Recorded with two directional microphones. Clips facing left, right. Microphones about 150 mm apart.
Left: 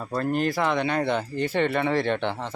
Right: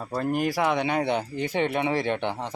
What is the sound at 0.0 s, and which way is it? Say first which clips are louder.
Speech: left 1 dB; 10° right (ahead or behind).